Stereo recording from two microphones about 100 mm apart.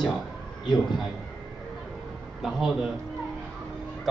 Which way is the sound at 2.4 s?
5° right (ahead or behind).